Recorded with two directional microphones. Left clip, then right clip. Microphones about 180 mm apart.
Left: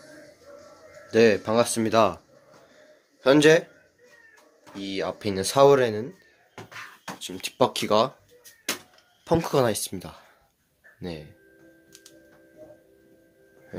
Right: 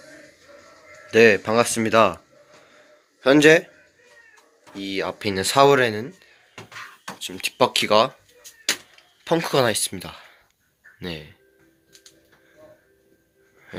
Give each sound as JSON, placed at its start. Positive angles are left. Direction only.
{"t": 1.0, "sound": "speech", "side_deg": -5}
{"t": 7.2, "sound": "speech", "side_deg": 0}
{"t": 9.2, "sound": "speech", "side_deg": 10}